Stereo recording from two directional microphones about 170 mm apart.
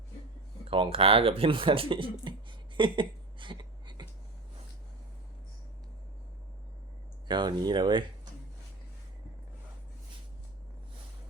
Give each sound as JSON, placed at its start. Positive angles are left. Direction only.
{"t": 0.7, "sound": "speech", "side_deg": -35}
{"t": 7.3, "sound": "speech", "side_deg": -25}